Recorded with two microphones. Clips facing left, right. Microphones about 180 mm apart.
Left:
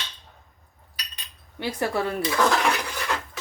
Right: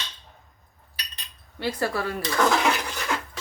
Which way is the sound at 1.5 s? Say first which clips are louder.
Left 1 dB; 15° left (ahead or behind).